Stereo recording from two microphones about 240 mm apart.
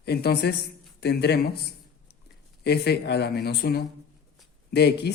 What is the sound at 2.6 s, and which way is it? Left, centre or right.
Speech, left.